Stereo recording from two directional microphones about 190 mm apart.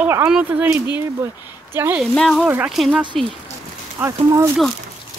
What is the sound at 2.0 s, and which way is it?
Speech, 5° left (ahead or behind).